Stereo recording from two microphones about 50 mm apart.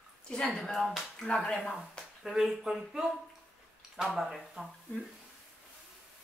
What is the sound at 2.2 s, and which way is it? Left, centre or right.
Speech, centre.